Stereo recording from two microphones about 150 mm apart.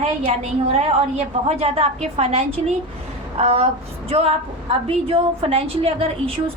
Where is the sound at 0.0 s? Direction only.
50° right (ahead or behind).